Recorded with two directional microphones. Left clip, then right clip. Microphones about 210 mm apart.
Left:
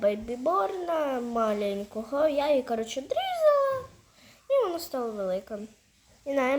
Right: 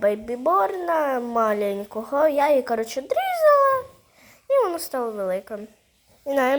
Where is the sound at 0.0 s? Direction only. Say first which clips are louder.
Right 5 dB; 15° right (ahead or behind).